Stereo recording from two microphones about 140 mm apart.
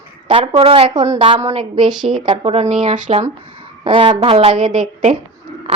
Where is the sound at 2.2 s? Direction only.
45° right (ahead or behind).